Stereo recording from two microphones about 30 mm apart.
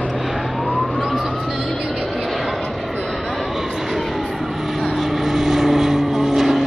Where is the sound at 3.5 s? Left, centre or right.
Centre.